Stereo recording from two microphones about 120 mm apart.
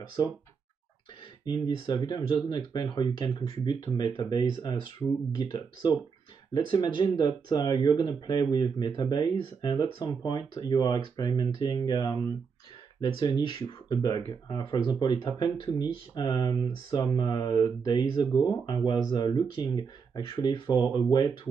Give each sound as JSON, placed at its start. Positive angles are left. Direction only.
{"t": 1.4, "sound": "speech", "side_deg": 35}
{"t": 5.0, "sound": "speech", "side_deg": 15}
{"t": 5.4, "sound": "speech", "side_deg": 40}
{"t": 15.2, "sound": "speech", "side_deg": 40}